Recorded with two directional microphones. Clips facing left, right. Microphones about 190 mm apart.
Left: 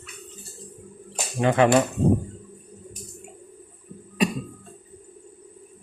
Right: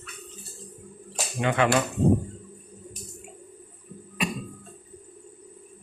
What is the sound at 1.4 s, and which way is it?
Speech, 35° left (ahead or behind).